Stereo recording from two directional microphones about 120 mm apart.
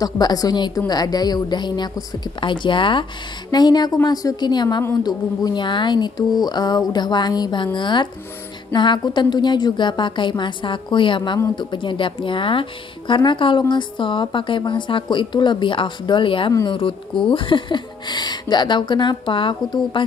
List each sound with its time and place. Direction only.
0.0 s speech: 35° left (ahead or behind)